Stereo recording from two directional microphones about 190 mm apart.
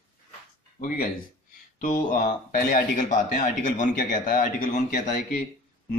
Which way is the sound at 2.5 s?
45° left (ahead or behind).